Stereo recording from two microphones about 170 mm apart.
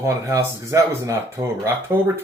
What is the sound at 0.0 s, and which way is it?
Speech, 20° right (ahead or behind).